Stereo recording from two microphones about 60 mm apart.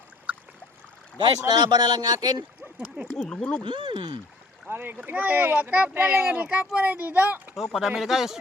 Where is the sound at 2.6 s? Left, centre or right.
Centre.